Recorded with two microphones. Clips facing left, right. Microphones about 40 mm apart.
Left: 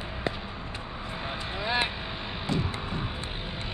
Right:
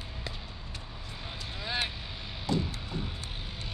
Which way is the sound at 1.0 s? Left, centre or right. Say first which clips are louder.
Left 8 dB; left.